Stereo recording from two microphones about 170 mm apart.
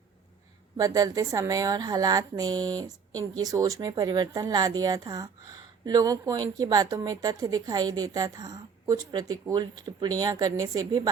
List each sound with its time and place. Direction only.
0.8 s speech: 20° right (ahead or behind)